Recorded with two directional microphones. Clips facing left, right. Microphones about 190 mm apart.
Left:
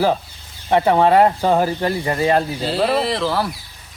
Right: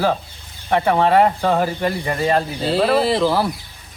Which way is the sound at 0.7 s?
20° left (ahead or behind).